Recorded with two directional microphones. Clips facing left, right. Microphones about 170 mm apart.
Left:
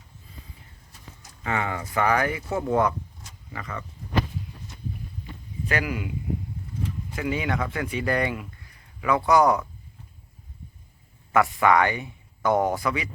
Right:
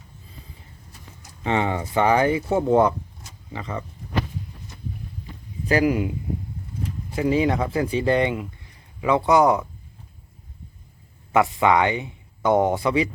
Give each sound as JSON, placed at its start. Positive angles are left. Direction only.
{"t": 1.5, "sound": "speech", "side_deg": -25}
{"t": 5.6, "sound": "speech", "side_deg": -35}
{"t": 7.2, "sound": "speech", "side_deg": -30}
{"t": 11.3, "sound": "speech", "side_deg": -20}